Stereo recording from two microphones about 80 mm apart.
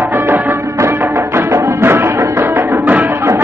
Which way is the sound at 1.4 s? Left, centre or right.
Right.